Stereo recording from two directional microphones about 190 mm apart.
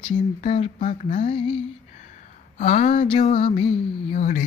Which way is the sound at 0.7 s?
40° left (ahead or behind).